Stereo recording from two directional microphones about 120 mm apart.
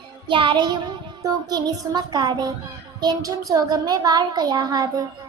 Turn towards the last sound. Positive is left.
turn(degrees=-35)  # may be behind; listen again after turning